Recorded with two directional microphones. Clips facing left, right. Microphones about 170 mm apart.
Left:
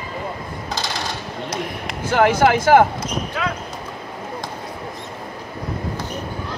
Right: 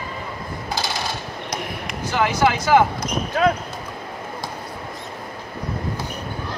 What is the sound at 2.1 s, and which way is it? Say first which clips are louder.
Speech: left 4 dB; 55° left (ahead or behind).